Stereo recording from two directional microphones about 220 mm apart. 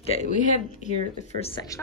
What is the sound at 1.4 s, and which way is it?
Speech, 25° left (ahead or behind).